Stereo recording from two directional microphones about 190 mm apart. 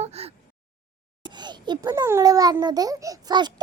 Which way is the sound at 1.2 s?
25° right (ahead or behind).